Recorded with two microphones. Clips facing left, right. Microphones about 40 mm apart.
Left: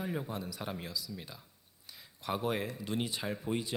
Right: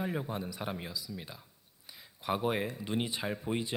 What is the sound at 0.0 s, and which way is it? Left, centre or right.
Speech, centre.